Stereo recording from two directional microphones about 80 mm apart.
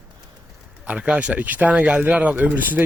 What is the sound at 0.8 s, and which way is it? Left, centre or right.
Speech, centre.